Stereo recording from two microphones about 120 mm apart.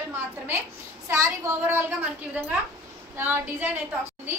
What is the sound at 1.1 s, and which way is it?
Speech, 25° right (ahead or behind).